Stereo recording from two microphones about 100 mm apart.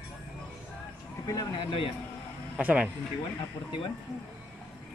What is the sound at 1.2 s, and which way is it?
Speech, 40° left (ahead or behind).